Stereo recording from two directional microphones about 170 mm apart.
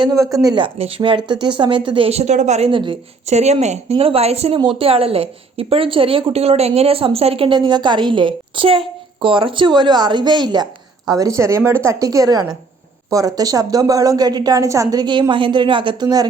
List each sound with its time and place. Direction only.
0.0 s a woman's voice: 20° right (ahead or behind)
3.2 s a woman's voice: 40° right (ahead or behind); by 16.2 s 25° right (ahead or behind)